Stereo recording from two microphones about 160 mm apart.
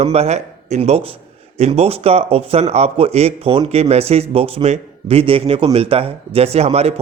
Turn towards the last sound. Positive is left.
turn(degrees=-40)  # may be behind; listen again after turning